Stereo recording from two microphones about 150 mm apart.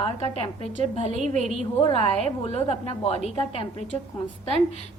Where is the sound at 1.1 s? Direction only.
55° right (ahead or behind).